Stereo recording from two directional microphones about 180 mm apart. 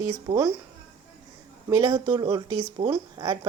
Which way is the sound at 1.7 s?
20° right (ahead or behind).